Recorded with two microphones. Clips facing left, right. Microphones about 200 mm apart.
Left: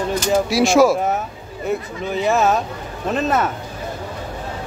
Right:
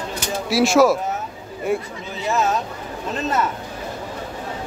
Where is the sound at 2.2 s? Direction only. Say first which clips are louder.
Left 4 dB; 60° left (ahead or behind).